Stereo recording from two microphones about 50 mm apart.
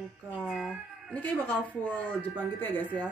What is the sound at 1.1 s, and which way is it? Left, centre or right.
Speech, left.